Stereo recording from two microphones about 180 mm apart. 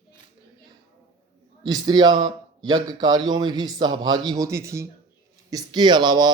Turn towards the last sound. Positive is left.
turn(degrees=-25)  # may be behind; listen again after turning